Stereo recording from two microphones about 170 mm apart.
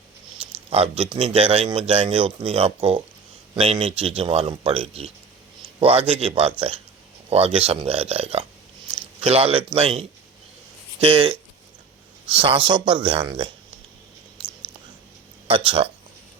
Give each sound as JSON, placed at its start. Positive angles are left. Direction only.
{"t": 0.3, "sound": "speech", "side_deg": -35}
{"t": 8.9, "sound": "a sound", "side_deg": -35}
{"t": 9.7, "sound": "speech", "side_deg": -35}
{"t": 15.4, "sound": "speech", "side_deg": -30}